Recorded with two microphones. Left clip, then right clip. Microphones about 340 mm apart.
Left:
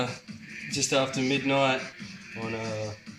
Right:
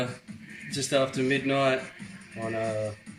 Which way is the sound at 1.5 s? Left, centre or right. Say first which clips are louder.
Left 1 dB; centre.